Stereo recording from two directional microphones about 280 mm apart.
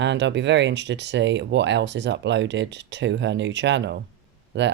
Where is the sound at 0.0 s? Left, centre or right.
Right.